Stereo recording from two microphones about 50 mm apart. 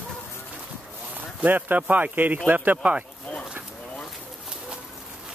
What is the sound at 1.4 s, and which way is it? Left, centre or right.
Speech, right.